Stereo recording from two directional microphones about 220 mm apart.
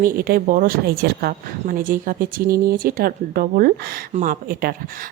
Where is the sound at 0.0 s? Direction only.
40° right (ahead or behind).